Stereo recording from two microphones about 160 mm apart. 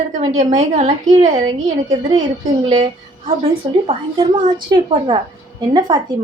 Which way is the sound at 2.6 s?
35° right (ahead or behind).